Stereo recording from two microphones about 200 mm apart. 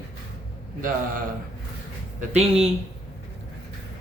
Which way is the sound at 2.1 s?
35° right (ahead or behind).